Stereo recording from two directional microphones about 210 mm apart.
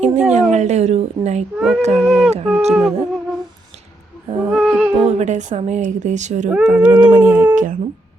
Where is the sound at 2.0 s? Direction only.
Centre (ahead or behind).